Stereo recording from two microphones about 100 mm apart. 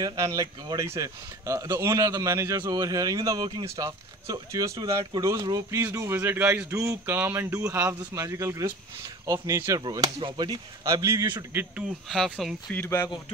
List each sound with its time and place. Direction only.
0.0 s speech: 40° right (ahead or behind)
0.7 s speech: 30° right (ahead or behind)
5.9 s speech: 25° right (ahead or behind)
11.5 s speech: 15° right (ahead or behind)
12.1 s speech: centre (ahead or behind)
12.7 s speech: 25° left (ahead or behind)